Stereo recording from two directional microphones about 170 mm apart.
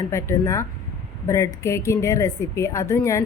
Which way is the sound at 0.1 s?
15° left (ahead or behind).